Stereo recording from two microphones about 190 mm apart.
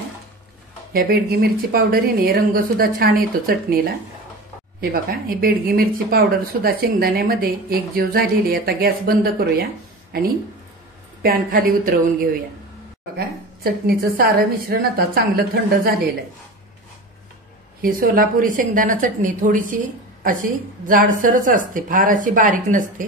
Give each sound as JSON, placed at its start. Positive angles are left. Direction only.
{"t": 0.9, "sound": "speech", "side_deg": -55}
{"t": 5.4, "sound": "speech", "side_deg": -50}
{"t": 11.2, "sound": "speech", "side_deg": -50}
{"t": 13.7, "sound": "speech", "side_deg": -50}
{"t": 17.8, "sound": "speech", "side_deg": -45}